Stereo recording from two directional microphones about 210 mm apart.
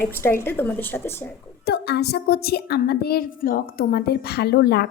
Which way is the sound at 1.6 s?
50° left (ahead or behind).